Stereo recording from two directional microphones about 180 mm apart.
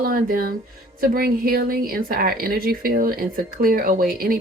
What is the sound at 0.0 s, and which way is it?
Speech, 55° right (ahead or behind).